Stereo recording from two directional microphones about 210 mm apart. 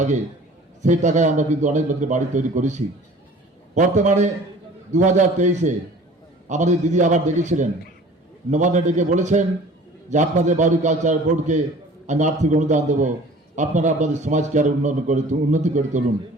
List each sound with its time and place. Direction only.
0.8 s a man's voice: 35° right (ahead or behind)